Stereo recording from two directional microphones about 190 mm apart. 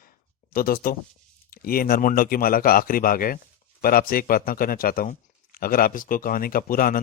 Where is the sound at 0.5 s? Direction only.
50° left (ahead or behind).